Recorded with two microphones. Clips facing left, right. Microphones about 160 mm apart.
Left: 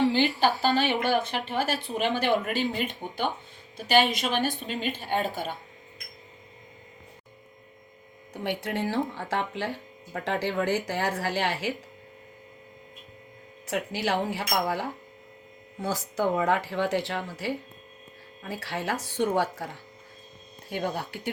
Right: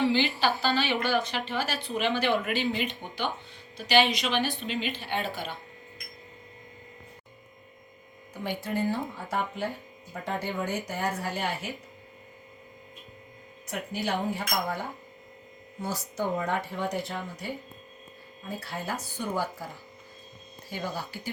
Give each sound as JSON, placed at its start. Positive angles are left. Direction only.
{"t": 0.0, "sound": "a sound", "side_deg": 40}
{"t": 0.6, "sound": "a woman's voice", "side_deg": 45}
{"t": 8.3, "sound": "speech", "side_deg": 75}
{"t": 13.7, "sound": "speech", "side_deg": 90}
{"t": 20.7, "sound": "speech", "side_deg": 60}